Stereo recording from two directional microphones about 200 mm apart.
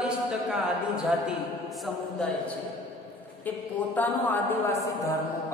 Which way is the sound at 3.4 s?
10° left (ahead or behind).